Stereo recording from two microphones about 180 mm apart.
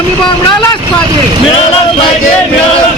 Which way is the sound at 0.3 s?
25° left (ahead or behind).